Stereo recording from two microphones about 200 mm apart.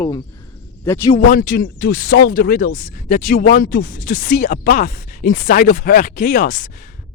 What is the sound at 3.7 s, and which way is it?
Speech, 60° left (ahead or behind).